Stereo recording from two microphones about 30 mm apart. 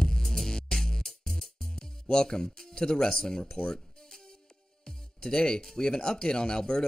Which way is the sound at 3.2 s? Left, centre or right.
Centre.